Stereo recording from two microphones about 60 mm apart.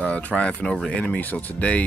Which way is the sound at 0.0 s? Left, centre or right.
Left.